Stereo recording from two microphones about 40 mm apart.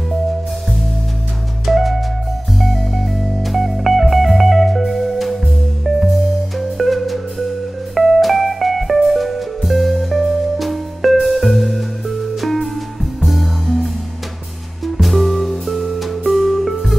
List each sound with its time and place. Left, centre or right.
1.7 s music: centre
6.8 s music: centre
15.0 s music: centre